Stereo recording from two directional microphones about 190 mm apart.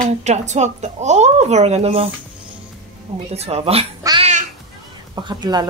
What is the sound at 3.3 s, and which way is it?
Speech, 30° right (ahead or behind).